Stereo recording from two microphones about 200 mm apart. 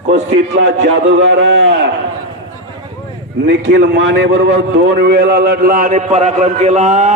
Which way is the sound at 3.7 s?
60° right (ahead or behind).